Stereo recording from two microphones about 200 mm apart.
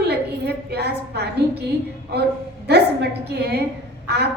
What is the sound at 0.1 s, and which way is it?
A woman's voice, 55° right (ahead or behind).